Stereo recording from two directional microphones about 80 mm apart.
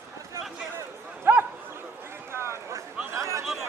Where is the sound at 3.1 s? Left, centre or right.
Right.